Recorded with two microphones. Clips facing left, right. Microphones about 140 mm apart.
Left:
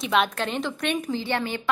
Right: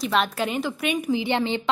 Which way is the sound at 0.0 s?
Centre (ahead or behind).